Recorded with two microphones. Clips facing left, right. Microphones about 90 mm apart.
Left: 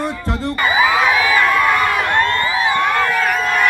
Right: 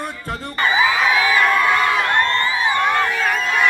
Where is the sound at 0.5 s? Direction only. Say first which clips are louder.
Left 1 dB; 5° left (ahead or behind).